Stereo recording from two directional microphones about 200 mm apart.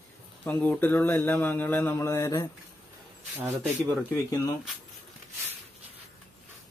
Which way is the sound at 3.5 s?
5° left (ahead or behind).